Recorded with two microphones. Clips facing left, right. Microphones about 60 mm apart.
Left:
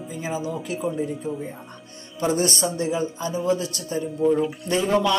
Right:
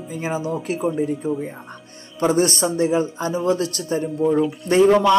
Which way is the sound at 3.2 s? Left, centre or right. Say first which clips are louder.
Right 3 dB; right.